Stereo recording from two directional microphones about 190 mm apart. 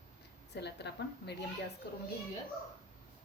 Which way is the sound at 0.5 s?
60° left (ahead or behind).